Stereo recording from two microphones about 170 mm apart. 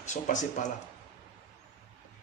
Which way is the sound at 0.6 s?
50° left (ahead or behind).